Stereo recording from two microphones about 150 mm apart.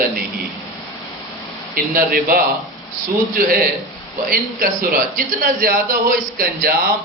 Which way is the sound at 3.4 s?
65° right (ahead or behind).